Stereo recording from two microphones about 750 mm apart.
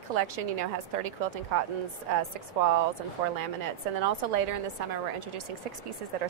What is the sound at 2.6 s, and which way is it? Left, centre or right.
Speech, right.